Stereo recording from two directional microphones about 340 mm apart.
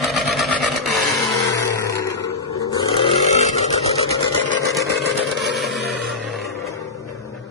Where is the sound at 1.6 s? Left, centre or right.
Centre.